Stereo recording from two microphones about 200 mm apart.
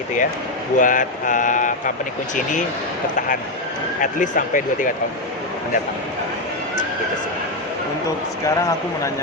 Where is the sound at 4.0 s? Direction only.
40° left (ahead or behind).